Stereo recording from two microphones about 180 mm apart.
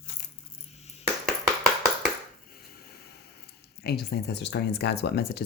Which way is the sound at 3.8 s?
60° left (ahead or behind).